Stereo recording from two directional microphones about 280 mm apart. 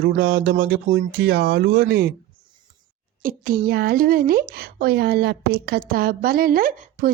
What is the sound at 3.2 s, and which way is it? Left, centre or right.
Speech, right.